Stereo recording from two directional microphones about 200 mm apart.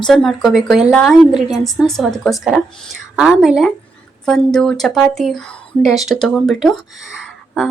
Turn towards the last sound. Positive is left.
turn(degrees=0)  # may be behind; listen again after turning